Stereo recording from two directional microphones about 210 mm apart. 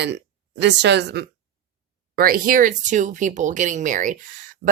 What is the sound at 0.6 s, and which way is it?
A woman's voice, 55° right (ahead or behind).